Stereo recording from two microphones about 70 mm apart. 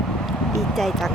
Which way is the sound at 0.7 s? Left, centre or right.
Centre.